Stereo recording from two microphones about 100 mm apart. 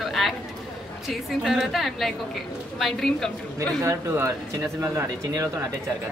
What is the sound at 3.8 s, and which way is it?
A man's voice, 30° right (ahead or behind).